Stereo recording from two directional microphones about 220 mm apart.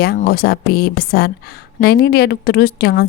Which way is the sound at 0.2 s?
45° left (ahead or behind).